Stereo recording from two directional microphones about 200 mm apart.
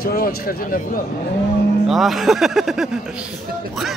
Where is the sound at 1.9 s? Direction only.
Centre (ahead or behind).